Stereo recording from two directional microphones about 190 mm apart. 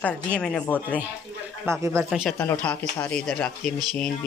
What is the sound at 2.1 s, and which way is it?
Speech, centre (ahead or behind).